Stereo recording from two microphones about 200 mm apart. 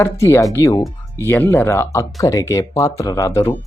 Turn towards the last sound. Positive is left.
turn(degrees=15)  # may be behind; listen again after turning